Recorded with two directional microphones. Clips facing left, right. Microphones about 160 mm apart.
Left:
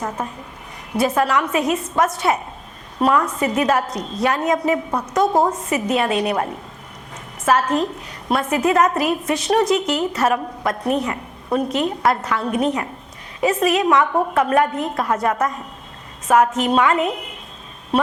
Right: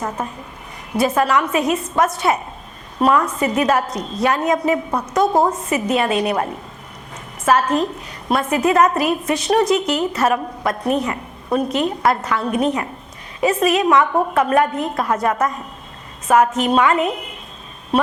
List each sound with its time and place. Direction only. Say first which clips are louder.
0.9 s a woman's voice: right 1 dB; 15° right (ahead or behind)
5.7 s a woman's voice: right 1 dB; 10° right (ahead or behind)